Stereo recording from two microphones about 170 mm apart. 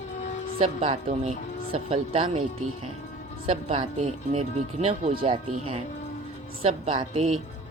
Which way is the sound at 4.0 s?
40° right (ahead or behind).